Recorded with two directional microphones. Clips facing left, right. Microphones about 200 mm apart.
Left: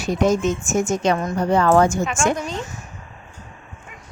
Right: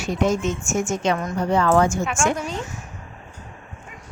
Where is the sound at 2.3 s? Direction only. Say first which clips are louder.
Left 1 dB; 10° right (ahead or behind).